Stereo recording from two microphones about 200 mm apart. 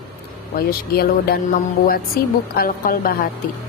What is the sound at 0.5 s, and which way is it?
Music, 50° left (ahead or behind).